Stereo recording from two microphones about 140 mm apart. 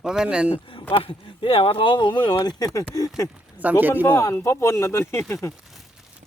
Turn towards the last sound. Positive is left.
turn(degrees=20)  # may be behind; listen again after turning